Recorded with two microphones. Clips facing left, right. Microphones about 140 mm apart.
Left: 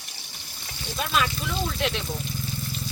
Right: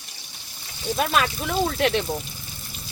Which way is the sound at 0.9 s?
60° right (ahead or behind).